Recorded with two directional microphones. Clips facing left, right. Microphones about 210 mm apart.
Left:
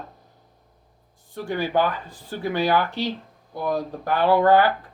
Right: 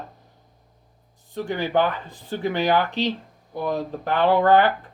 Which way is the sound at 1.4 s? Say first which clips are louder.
Even; 20° right (ahead or behind).